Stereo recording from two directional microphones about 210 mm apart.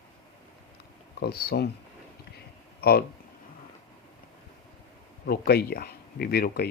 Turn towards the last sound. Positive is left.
turn(degrees=45)  # may be behind; listen again after turning